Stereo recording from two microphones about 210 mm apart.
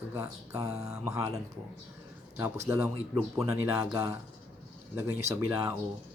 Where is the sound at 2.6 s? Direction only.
15° right (ahead or behind).